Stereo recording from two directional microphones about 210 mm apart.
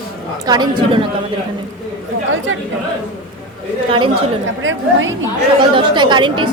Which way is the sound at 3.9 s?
25° right (ahead or behind).